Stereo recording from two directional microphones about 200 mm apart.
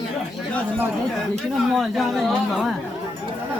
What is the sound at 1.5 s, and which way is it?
Speech, centre (ahead or behind).